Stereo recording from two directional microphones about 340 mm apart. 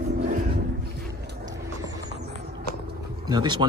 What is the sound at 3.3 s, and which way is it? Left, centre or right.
Speech, centre.